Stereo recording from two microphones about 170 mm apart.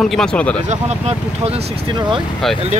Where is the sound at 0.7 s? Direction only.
40° right (ahead or behind).